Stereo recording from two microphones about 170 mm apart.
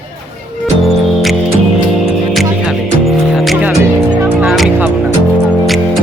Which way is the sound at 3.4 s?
Centre (ahead or behind).